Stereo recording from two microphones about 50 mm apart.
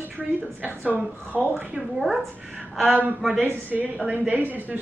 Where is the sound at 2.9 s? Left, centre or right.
Right.